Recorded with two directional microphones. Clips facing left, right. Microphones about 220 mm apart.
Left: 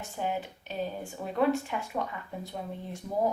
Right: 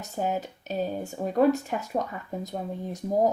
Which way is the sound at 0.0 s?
40° right (ahead or behind).